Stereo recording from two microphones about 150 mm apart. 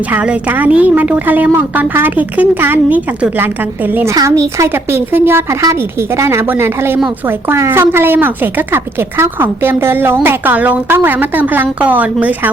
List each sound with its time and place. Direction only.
0.1 s a woman's voice: 10° right (ahead or behind)
4.1 s a woman's voice: 25° right (ahead or behind)